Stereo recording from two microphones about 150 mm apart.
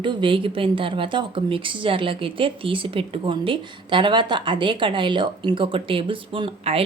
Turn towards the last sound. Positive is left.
turn(degrees=-40)  # may be behind; listen again after turning